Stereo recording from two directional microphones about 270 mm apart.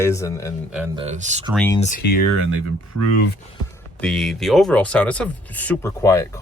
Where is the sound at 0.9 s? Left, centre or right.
Right.